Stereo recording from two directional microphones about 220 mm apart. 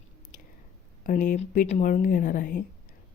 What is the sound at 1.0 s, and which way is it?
Speech, 40° left (ahead or behind).